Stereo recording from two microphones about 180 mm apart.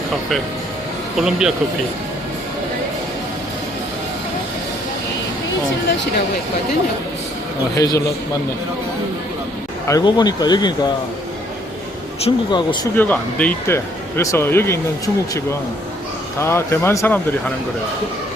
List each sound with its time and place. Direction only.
1.1 s speech: 5° right (ahead or behind)
7.8 s speech: 20° left (ahead or behind)
9.8 s speech: 20° left (ahead or behind)
12.2 s speech: 25° left (ahead or behind)
13.0 s speech: 10° left (ahead or behind)
16.4 s speech: 15° left (ahead or behind)